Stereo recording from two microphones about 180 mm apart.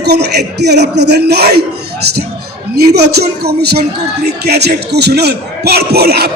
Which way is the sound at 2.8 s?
65° right (ahead or behind).